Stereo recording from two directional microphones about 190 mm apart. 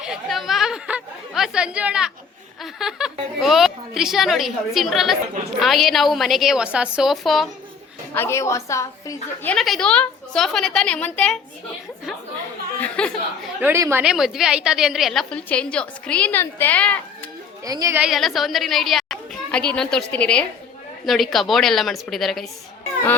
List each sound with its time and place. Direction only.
0.0 s chatter: centre (ahead or behind)
2.7 s a woman's voice: centre (ahead or behind)
8.1 s a woman's voice: 15° left (ahead or behind)
12.8 s speech: 5° left (ahead or behind)
13.6 s a woman's voice: 15° right (ahead or behind)
14.0 s a woman's voice: 5° right (ahead or behind)
17.7 s a woman's voice: 15° right (ahead or behind)
18.0 s a woman's voice: centre (ahead or behind)